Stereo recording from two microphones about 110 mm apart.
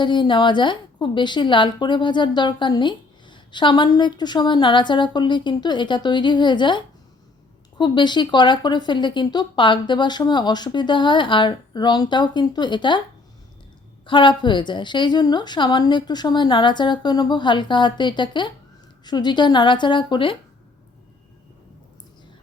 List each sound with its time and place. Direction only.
0.0 s a woman's voice: 45° left (ahead or behind)
14.1 s a woman's voice: 45° left (ahead or behind)